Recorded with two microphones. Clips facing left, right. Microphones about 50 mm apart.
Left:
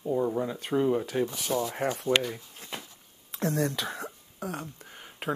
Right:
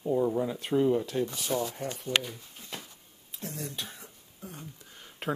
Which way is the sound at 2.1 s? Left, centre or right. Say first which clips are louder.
Left 3 dB; left.